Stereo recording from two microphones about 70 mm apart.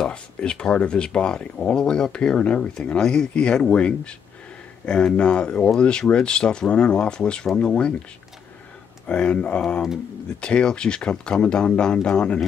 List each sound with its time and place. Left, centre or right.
0.0 s speech: centre
9.0 s speech: centre